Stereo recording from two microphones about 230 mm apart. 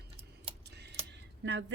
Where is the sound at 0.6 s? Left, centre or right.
Right.